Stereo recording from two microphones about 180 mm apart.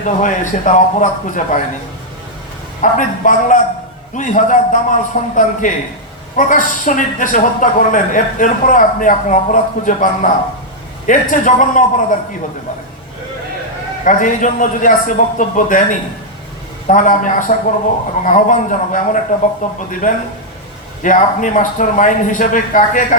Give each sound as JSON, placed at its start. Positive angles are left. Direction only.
{"t": 0.0, "sound": "a man's voice", "side_deg": 45}
{"t": 2.8, "sound": "a man's voice", "side_deg": 45}
{"t": 14.0, "sound": "a man's voice", "side_deg": 45}
{"t": 21.0, "sound": "a man's voice", "side_deg": 45}